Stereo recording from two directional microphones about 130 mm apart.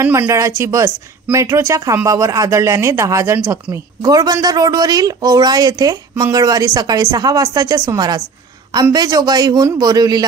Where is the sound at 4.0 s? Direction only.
30° right (ahead or behind).